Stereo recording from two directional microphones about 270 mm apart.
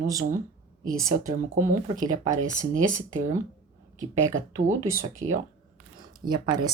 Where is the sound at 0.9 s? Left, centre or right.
Centre.